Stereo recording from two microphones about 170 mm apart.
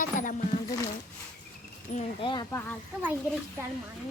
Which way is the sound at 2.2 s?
30° left (ahead or behind).